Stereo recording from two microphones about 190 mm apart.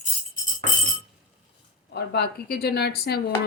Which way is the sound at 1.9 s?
60° left (ahead or behind).